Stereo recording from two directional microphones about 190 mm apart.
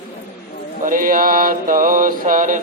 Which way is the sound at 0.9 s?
45° right (ahead or behind).